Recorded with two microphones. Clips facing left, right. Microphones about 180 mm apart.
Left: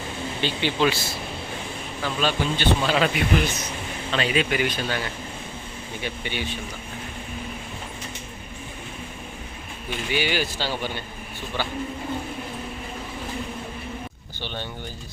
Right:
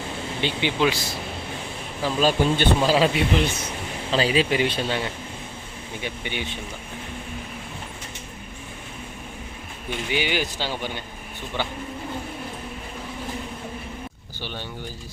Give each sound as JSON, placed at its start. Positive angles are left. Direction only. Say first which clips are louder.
{"t": 0.4, "sound": "speech", "louder": "even", "side_deg": -15}
{"t": 2.0, "sound": "speech", "louder": "right 4 dB", "side_deg": -45}
{"t": 2.9, "sound": "speech", "louder": "right 2 dB", "side_deg": -30}
{"t": 10.1, "sound": "speech", "louder": "even", "side_deg": -15}
{"t": 14.4, "sound": "speech", "louder": "left 1 dB", "side_deg": -10}